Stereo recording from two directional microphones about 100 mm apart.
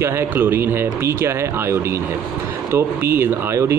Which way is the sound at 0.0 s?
25° right (ahead or behind).